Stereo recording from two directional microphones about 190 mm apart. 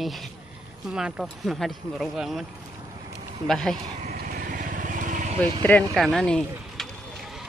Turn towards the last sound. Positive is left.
turn(degrees=5)  # may be behind; listen again after turning